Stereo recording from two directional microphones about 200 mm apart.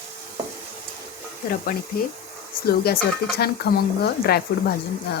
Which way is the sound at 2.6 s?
50° left (ahead or behind).